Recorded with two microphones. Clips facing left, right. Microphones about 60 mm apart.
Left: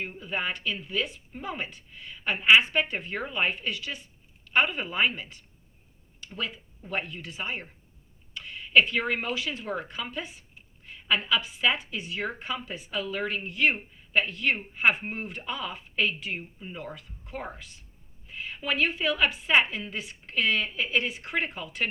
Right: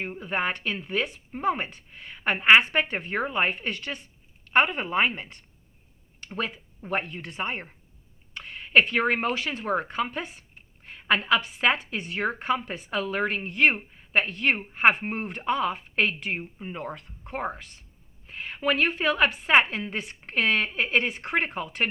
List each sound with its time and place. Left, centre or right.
0.0 s speech: right